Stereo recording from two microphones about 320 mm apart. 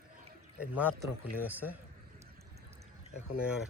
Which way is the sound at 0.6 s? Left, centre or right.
Centre.